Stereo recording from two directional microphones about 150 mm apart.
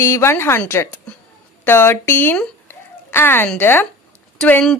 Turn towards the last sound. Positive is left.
turn(degrees=5)  # may be behind; listen again after turning